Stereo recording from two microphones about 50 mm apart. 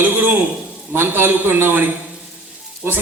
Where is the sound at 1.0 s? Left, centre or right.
Right.